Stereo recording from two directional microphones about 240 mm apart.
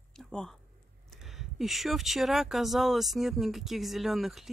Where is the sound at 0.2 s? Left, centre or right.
Centre.